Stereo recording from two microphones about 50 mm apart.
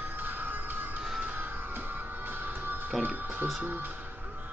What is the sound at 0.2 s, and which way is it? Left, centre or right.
Music, right.